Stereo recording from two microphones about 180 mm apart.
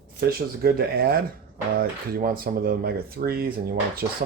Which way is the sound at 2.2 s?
50° right (ahead or behind).